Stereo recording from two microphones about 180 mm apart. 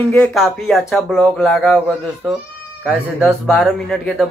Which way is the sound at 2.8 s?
5° right (ahead or behind).